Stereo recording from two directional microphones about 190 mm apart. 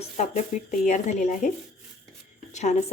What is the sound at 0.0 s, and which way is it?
Speech, 35° left (ahead or behind).